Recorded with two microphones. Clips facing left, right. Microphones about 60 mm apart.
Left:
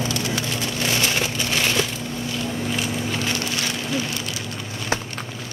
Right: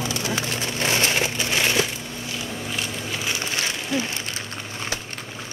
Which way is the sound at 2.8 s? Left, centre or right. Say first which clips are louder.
Left 4 dB; centre.